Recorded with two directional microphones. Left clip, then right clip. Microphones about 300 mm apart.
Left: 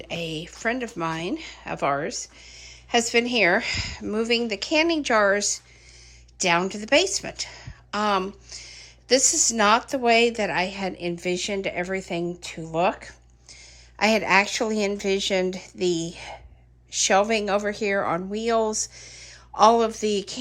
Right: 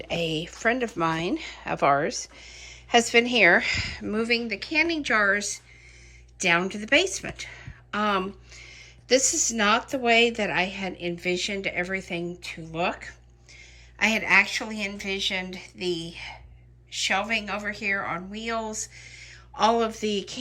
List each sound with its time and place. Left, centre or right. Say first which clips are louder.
0.0 s a woman's voice: right 3 dB; centre